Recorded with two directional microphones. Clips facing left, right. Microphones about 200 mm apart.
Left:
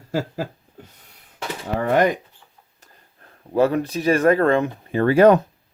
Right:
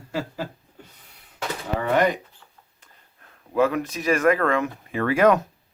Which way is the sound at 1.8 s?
45° left (ahead or behind).